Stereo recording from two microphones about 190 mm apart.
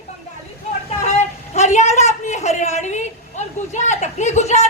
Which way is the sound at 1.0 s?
35° left (ahead or behind).